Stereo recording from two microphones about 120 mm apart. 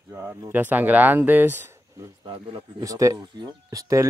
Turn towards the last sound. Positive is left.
turn(degrees=-25)  # may be behind; listen again after turning